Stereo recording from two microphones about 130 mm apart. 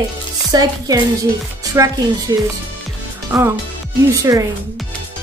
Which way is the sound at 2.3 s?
30° right (ahead or behind).